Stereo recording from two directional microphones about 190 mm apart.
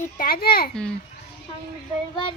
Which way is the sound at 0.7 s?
5° left (ahead or behind).